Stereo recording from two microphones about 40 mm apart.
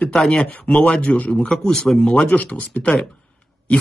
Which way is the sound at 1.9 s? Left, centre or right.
Left.